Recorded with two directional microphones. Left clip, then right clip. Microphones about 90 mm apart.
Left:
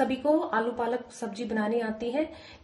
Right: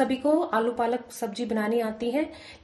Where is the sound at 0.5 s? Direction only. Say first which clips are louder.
Right 3 dB; 35° right (ahead or behind).